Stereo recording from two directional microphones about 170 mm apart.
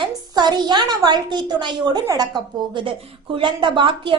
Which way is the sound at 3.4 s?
30° right (ahead or behind).